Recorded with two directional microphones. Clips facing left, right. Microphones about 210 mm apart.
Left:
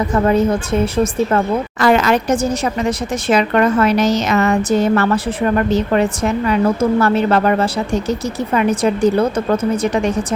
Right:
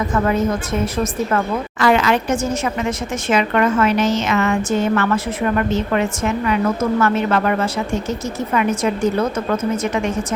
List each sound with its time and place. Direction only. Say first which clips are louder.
0.1 s a woman's voice: left 5 dB; 30° left (ahead or behind)
1.8 s a woman's voice: left 2 dB; 40° left (ahead or behind)